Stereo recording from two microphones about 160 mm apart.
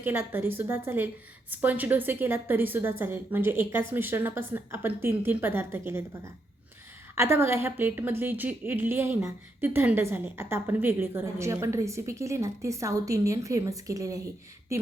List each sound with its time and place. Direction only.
0.0 s a woman's voice: 15° right (ahead or behind)